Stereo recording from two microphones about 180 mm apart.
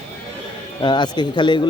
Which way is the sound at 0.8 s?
25° left (ahead or behind).